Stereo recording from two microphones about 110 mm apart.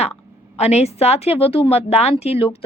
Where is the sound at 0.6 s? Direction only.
80° left.